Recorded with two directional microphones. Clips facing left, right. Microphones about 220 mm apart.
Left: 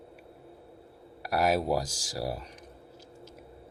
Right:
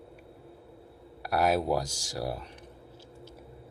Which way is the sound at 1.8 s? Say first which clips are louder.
Even; 35° left (ahead or behind).